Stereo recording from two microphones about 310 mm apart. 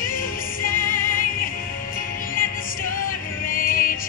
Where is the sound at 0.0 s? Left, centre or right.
Left.